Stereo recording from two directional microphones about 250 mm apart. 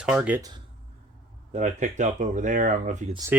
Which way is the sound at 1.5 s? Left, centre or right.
Right.